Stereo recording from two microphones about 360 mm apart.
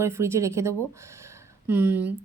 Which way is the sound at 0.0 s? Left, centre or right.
Centre.